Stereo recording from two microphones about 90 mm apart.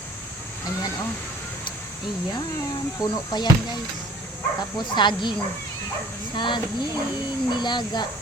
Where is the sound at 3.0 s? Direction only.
50° left (ahead or behind).